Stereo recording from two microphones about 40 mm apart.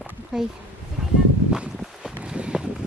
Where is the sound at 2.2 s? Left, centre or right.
Right.